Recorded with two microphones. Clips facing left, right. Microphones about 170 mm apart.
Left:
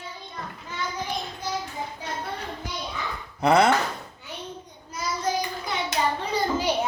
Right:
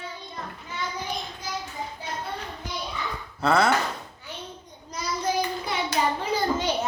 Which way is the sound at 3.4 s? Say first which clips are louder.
Left 3 dB; 20° left (ahead or behind).